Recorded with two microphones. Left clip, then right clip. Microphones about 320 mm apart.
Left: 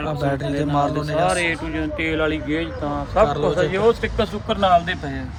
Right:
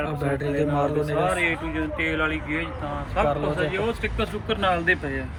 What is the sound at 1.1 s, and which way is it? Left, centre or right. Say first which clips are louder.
Speech: left 6 dB; left.